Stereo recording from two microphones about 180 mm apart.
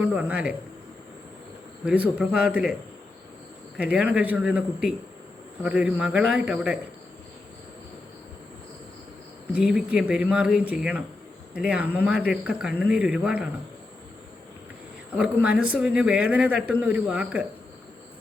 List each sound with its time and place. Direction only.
0.0 s speech: 5° right (ahead or behind)
1.8 s speech: 5° right (ahead or behind)
3.8 s a man's voice: 5° right (ahead or behind)
9.6 s a man's voice: 5° right (ahead or behind)
15.2 s a man's voice: 5° right (ahead or behind)